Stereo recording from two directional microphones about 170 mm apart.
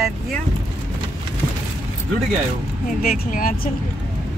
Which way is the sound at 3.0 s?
55° left (ahead or behind).